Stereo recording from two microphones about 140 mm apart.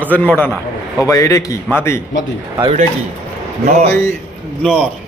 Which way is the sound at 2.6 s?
40° right (ahead or behind).